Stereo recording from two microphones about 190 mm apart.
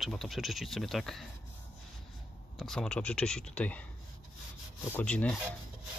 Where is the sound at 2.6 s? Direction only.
5° left (ahead or behind).